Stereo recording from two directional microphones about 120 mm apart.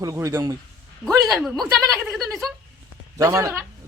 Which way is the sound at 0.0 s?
25° right (ahead or behind).